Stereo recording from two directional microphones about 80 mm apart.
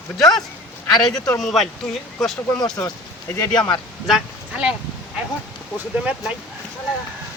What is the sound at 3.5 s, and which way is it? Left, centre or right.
Speech, left.